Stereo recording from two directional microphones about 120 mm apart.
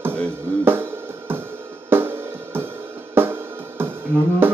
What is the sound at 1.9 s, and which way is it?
Cymbal, 20° right (ahead or behind).